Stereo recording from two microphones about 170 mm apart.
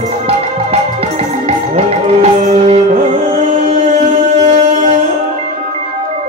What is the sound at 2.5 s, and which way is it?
Music, 45° right (ahead or behind).